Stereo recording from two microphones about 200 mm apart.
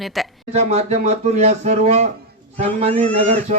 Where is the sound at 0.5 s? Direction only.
35° right (ahead or behind).